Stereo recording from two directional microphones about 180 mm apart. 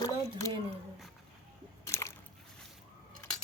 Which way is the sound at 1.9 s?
15° left (ahead or behind).